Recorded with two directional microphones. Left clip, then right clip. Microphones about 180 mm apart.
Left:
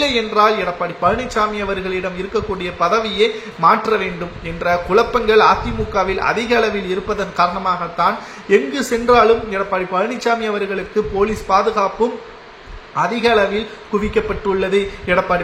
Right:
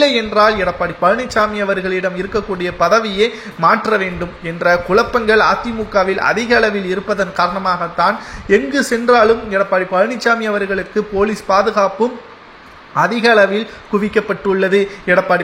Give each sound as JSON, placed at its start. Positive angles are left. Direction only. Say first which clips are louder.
{"t": 0.0, "sound": "speech", "louder": "right 3 dB", "side_deg": -20}